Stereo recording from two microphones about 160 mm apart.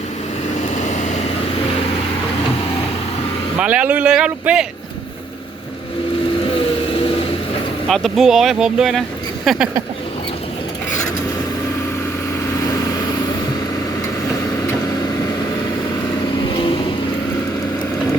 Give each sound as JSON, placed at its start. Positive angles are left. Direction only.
{"t": 0.9, "sound": "vehicle", "side_deg": 45}
{"t": 3.6, "sound": "speech", "side_deg": -10}
{"t": 7.9, "sound": "speech", "side_deg": 0}
{"t": 16.6, "sound": "vehicle", "side_deg": 35}